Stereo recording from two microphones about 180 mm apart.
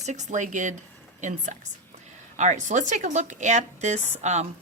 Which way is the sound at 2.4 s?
40° right (ahead or behind).